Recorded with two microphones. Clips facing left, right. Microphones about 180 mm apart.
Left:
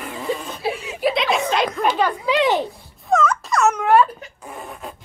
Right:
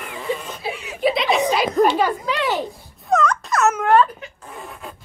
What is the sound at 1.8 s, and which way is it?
Speech, 40° right (ahead or behind).